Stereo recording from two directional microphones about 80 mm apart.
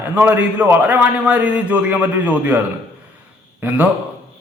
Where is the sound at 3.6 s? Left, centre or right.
Right.